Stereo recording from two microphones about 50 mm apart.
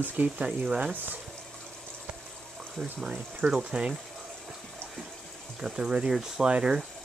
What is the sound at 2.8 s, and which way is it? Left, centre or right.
Speech, centre.